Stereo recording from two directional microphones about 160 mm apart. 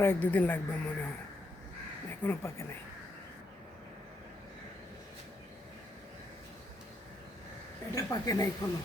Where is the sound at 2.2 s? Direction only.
15° left (ahead or behind).